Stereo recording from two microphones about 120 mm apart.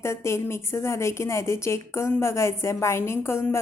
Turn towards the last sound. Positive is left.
turn(degrees=20)  # may be behind; listen again after turning